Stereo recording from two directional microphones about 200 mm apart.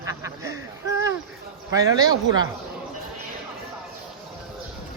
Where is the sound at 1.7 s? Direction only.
15° right (ahead or behind).